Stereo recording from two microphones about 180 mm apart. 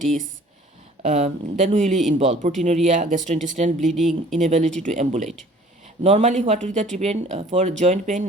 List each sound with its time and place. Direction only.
0.0 s speech: 45° right (ahead or behind)